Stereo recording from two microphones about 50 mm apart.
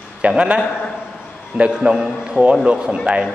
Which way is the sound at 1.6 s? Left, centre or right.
Centre.